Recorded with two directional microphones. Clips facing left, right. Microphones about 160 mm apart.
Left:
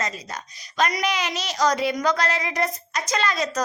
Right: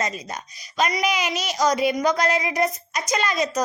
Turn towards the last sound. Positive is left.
turn(degrees=-15)  # may be behind; listen again after turning